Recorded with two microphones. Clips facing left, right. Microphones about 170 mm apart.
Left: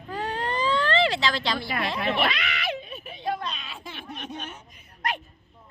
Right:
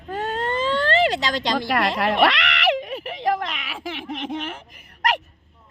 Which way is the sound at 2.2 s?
90° right.